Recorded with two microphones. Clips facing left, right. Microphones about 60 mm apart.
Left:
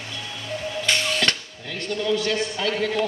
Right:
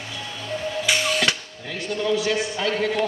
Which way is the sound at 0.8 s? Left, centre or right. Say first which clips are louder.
Right 1 dB; centre.